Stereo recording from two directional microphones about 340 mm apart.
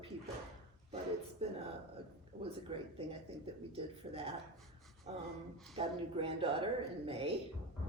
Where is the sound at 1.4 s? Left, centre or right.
Centre.